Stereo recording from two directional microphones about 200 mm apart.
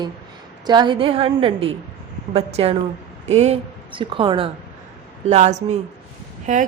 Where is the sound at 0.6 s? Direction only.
20° right (ahead or behind).